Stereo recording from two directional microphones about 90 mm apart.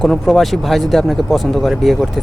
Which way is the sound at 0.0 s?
Centre (ahead or behind).